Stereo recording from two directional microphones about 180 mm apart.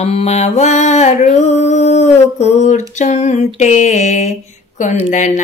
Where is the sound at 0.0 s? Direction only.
35° left (ahead or behind).